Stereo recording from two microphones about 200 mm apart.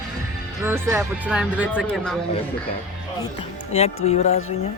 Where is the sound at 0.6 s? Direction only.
10° right (ahead or behind).